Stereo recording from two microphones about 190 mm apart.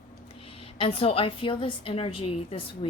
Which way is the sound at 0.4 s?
30° left (ahead or behind).